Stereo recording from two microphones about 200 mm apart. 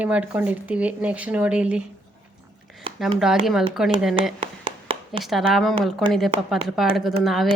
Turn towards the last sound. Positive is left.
turn(degrees=0)  # may be behind; listen again after turning